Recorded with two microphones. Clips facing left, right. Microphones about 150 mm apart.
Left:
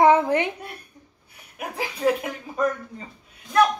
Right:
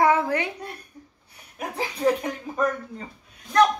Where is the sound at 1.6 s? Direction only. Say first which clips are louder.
Right 1 dB; 10° left (ahead or behind).